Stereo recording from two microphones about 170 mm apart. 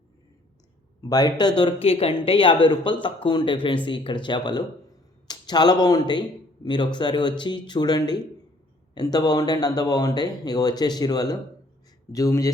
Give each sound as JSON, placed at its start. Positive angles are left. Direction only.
{"t": 1.0, "sound": "speech", "side_deg": 25}